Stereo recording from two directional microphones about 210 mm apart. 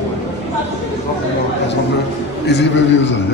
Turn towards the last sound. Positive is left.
turn(degrees=60)  # may be behind; listen again after turning